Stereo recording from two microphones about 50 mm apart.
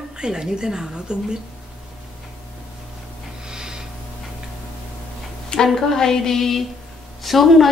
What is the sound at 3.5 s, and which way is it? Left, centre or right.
Snort, centre.